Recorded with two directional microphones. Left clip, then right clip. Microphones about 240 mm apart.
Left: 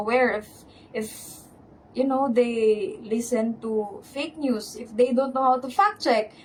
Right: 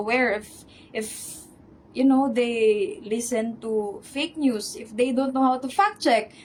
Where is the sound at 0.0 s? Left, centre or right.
Right.